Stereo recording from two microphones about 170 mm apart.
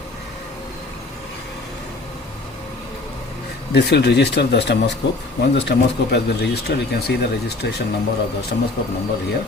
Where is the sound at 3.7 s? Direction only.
75° left (ahead or behind).